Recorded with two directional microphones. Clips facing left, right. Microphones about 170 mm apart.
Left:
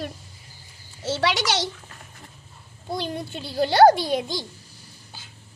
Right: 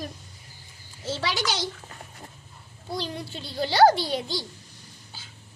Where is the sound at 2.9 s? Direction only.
50° left (ahead or behind).